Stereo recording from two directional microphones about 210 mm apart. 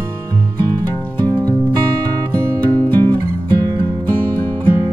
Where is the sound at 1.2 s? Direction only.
20° right (ahead or behind).